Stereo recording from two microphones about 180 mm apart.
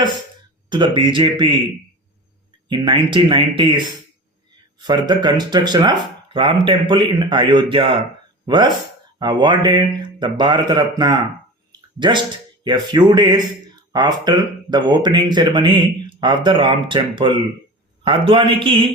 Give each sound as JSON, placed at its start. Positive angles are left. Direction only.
{"t": 0.7, "sound": "speech", "side_deg": -25}
{"t": 2.6, "sound": "speech", "side_deg": -25}